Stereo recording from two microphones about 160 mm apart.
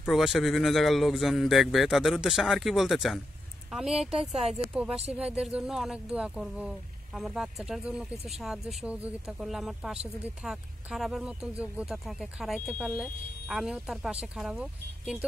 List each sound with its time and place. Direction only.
0.1 s a man's voice: centre (ahead or behind)